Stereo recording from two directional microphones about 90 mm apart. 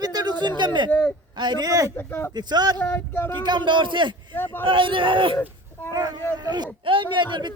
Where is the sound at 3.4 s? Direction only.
55° right (ahead or behind).